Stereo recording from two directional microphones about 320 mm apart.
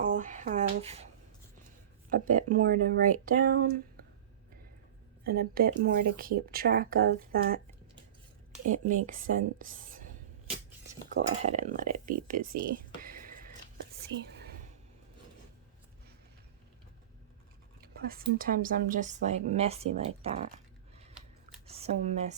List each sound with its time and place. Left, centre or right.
0.0 s a sound: right
2.3 s speech: right
5.2 s speech: right
8.6 s speech: right
11.1 s speech: right
12.4 s speech: right
12.6 s a sound: right
17.7 s speech: right
21.7 s speech: centre